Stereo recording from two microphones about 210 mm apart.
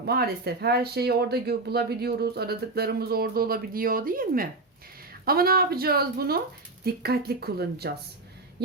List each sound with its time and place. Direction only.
0.0 s speech: 50° right (ahead or behind)